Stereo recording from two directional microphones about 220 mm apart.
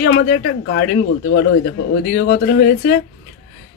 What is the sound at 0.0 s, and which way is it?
Speech, 45° left (ahead or behind).